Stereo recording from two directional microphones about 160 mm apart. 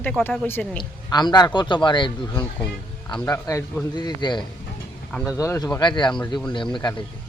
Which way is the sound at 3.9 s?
25° left (ahead or behind).